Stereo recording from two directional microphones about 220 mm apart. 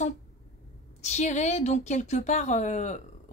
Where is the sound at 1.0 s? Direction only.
30° left (ahead or behind).